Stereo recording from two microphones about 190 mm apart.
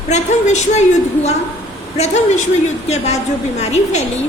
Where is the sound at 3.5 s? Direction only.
35° left (ahead or behind).